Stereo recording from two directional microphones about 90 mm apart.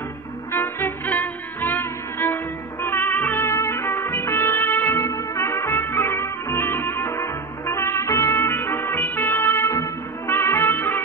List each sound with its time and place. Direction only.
0.5 s music: 25° left (ahead or behind)
5.0 s trumpet: 35° left (ahead or behind)
5.8 s music: 25° left (ahead or behind)
7.0 s trumpet: 30° left (ahead or behind)
9.8 s music: 30° left (ahead or behind)